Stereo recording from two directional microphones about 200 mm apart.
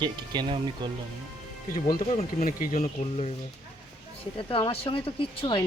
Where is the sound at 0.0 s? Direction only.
20° right (ahead or behind).